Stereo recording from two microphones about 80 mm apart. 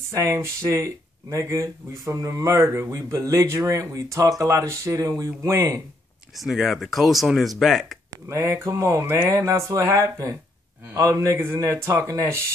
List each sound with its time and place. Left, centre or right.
0.1 s speech: right
6.4 s speech: centre
8.3 s speech: right